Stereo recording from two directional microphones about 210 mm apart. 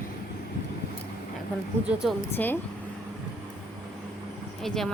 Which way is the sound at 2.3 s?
10° left (ahead or behind).